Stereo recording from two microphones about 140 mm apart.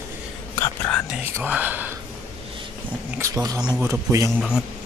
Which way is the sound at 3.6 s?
5° right (ahead or behind).